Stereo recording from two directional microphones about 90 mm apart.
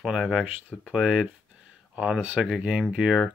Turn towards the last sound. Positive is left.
turn(degrees=-10)  # may be behind; listen again after turning